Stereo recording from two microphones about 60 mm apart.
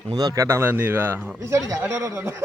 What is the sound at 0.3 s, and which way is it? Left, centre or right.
Speech, right.